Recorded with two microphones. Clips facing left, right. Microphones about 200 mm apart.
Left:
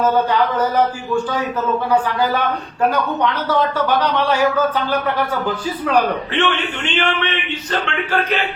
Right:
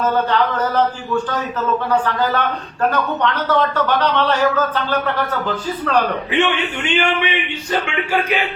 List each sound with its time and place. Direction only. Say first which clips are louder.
0.0 s speech: left 1 dB; 10° left (ahead or behind)
6.3 s a man's voice: right 1 dB; 10° right (ahead or behind)